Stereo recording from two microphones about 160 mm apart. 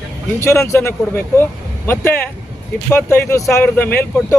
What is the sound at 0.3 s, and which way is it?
A man's voice, 15° left (ahead or behind).